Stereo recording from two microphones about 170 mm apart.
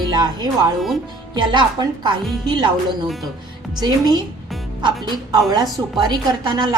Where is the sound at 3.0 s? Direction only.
Centre (ahead or behind).